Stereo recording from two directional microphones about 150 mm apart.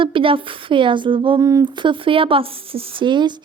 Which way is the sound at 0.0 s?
35° right (ahead or behind).